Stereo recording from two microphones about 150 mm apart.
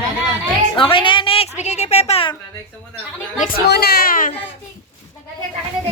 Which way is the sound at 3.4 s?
85° left.